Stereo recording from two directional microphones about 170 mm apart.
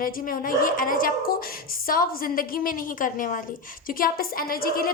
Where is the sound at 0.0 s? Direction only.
55° left (ahead or behind).